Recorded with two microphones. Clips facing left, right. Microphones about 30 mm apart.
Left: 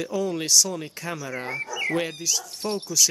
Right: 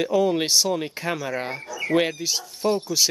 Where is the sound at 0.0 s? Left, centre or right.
Right.